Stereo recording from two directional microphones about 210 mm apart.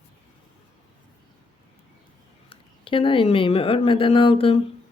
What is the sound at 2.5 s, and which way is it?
A woman's voice, 25° left (ahead or behind).